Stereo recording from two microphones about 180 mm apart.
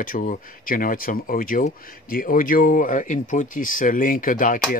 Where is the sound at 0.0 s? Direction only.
50° left (ahead or behind).